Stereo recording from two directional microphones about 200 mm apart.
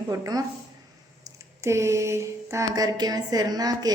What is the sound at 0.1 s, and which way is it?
Speech, 20° right (ahead or behind).